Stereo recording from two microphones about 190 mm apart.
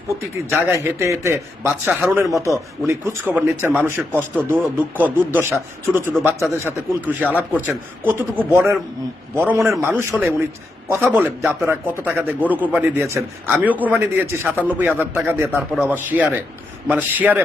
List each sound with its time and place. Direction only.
0.5 s a man's voice: 15° right (ahead or behind)